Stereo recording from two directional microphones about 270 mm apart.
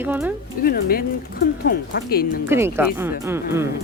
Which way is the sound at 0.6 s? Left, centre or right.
Left.